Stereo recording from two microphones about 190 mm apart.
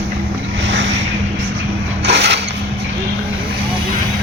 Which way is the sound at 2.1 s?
60° right (ahead or behind).